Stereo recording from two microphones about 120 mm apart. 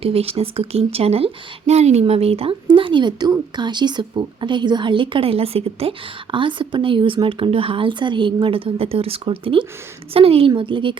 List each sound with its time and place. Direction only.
0.0 s a woman's voice: 55° right (ahead or behind)
6.3 s speech: 45° right (ahead or behind)